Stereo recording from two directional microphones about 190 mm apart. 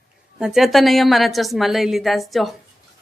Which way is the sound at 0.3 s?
5° right (ahead or behind).